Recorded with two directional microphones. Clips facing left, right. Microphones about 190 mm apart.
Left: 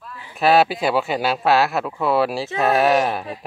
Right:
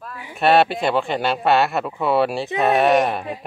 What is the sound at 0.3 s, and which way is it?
Speech, centre (ahead or behind).